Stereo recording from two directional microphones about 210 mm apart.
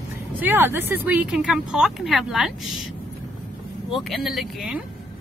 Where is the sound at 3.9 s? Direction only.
Centre (ahead or behind).